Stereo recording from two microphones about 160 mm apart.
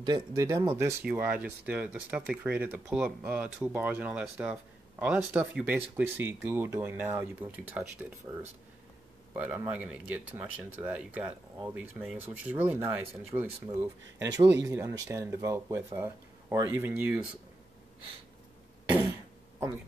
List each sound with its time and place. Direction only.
0.0 s speech: 25° right (ahead or behind)